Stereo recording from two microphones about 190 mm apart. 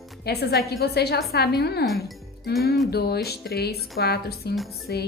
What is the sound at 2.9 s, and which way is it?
A woman's voice, 55° left (ahead or behind).